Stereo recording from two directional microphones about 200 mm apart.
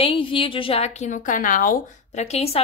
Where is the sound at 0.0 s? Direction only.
25° left (ahead or behind).